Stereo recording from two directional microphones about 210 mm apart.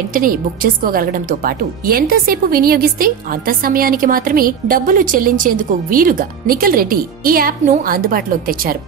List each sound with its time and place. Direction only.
0.1 s speech: 40° right (ahead or behind)